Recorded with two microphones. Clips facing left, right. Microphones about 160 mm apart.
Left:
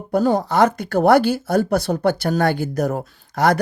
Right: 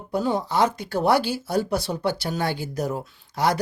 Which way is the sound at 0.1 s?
45° left (ahead or behind).